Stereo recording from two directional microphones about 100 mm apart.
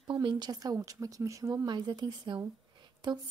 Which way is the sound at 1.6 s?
45° right (ahead or behind).